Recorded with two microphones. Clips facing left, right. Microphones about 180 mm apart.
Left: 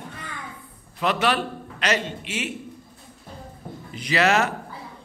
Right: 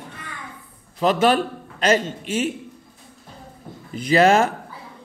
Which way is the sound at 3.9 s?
50° right (ahead or behind).